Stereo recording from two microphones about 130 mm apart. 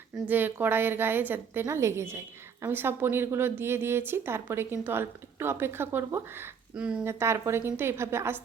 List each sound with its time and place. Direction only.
0.3 s a woman's voice: 15° right (ahead or behind)
7.0 s a woman's voice: 20° right (ahead or behind)